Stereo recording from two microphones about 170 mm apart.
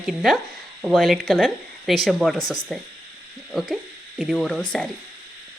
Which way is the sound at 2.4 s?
20° left (ahead or behind).